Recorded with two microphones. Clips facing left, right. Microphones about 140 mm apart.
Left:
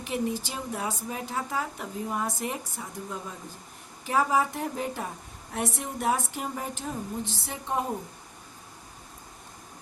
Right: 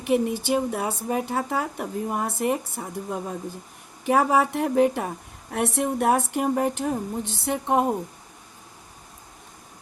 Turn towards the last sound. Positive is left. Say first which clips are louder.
# right 8 dB
turn(degrees=-65)  # may be behind; listen again after turning